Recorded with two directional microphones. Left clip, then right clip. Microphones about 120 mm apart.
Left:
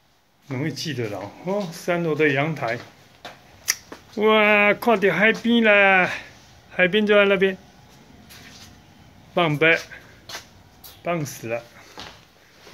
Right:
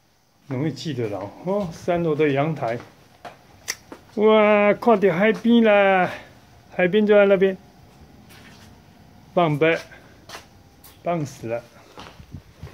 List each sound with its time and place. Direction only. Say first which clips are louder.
0.5 s speech: right 1 dB; 25° right (ahead or behind)
3.6 s speech: left 5 dB; 35° right (ahead or behind)
9.3 s speech: left 1 dB; 30° right (ahead or behind)
11.1 s speech: right 1 dB; 15° right (ahead or behind)